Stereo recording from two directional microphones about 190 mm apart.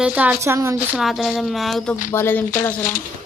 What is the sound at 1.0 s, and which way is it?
Speech, centre (ahead or behind).